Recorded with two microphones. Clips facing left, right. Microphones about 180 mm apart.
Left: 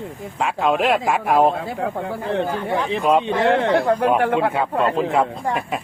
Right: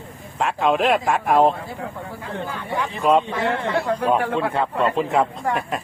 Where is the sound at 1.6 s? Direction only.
80° left.